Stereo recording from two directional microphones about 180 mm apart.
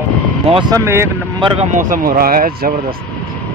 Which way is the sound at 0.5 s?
25° right (ahead or behind).